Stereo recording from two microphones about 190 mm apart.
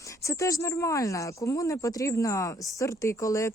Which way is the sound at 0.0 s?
15° left (ahead or behind).